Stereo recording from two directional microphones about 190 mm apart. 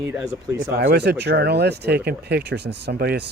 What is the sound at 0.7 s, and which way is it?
Speech, 55° right (ahead or behind).